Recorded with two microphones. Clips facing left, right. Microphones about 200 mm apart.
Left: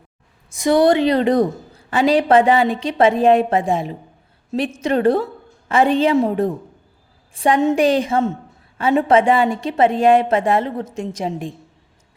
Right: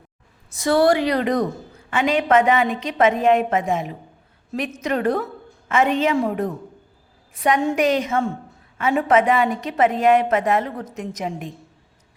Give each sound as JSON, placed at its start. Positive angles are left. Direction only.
{"t": 0.5, "sound": "a woman's voice", "side_deg": 15}